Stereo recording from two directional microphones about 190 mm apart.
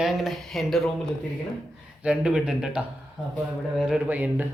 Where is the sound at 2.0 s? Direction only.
5° right (ahead or behind).